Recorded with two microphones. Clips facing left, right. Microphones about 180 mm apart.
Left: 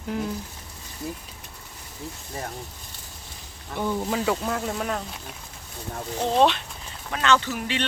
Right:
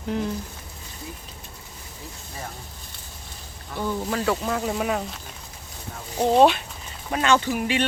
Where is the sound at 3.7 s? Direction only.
15° left (ahead or behind).